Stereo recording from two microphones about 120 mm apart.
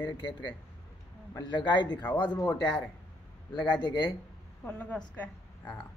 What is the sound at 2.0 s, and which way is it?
Speech, 15° left (ahead or behind).